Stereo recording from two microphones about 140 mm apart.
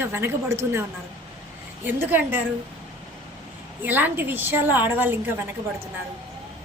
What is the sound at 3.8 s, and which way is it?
A woman's voice, 15° right (ahead or behind).